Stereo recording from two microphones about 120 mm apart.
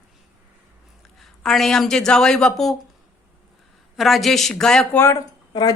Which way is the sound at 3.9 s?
Centre (ahead or behind).